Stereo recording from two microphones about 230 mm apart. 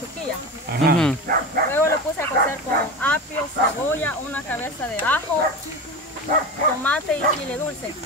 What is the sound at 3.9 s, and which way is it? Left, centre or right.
Speech, centre.